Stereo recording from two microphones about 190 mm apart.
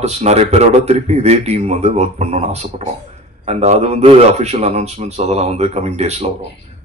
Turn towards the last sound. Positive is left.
turn(degrees=-35)  # may be behind; listen again after turning